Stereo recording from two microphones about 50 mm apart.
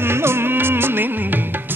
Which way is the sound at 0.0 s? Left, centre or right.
Right.